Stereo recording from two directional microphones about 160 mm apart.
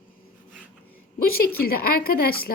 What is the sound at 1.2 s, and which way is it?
A woman's voice, 70° left (ahead or behind).